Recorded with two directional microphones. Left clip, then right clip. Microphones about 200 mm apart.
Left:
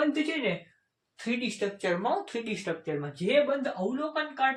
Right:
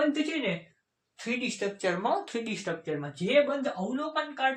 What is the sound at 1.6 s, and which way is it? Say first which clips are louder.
Speech: left 1 dB; 20° right (ahead or behind).